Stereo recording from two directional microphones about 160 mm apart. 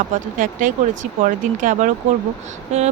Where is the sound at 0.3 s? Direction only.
55° right (ahead or behind).